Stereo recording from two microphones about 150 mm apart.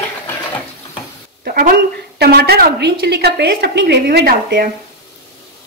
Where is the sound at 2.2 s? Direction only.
90° right.